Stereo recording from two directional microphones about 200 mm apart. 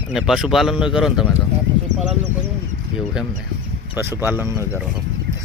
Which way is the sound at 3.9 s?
10° right (ahead or behind).